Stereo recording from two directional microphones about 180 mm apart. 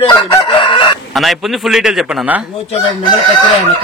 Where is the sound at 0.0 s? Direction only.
30° left (ahead or behind).